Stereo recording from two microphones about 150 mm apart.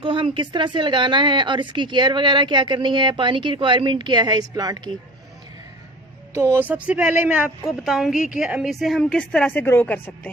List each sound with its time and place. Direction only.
0.0 s speech: 35° right (ahead or behind)
6.3 s a woman's voice: 15° right (ahead or behind); by 10.3 s 10° left (ahead or behind)